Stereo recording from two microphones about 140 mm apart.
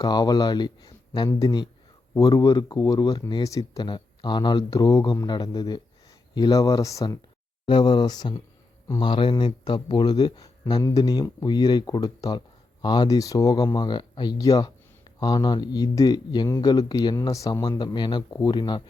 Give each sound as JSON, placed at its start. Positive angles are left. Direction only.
{"t": 0.0, "sound": "speech", "side_deg": 30}
{"t": 7.7, "sound": "speech", "side_deg": 35}